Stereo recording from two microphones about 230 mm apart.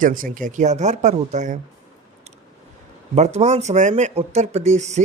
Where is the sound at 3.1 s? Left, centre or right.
Right.